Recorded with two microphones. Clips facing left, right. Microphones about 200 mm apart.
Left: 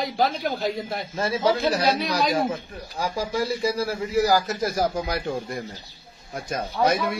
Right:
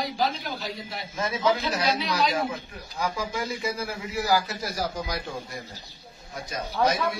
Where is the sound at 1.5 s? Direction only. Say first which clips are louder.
Left 4 dB; 50° left (ahead or behind).